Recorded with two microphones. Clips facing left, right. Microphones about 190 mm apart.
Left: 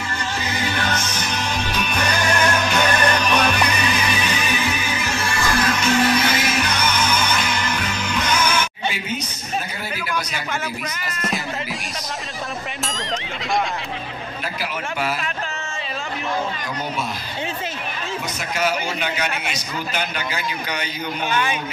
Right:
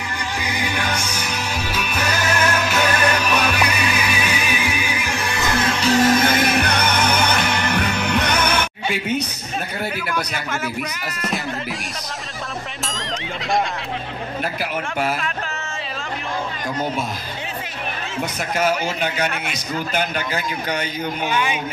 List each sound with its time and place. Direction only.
0.4 s music: 15° right (ahead or behind); by 8.6 s 60° right (ahead or behind)
10.1 s a man's voice: 5° right (ahead or behind)
12.8 s a man's voice: centre (ahead or behind)
14.6 s a man's voice: 50° right (ahead or behind)
18.6 s a man's voice: 50° right (ahead or behind)
21.3 s a man's voice: 10° right (ahead or behind)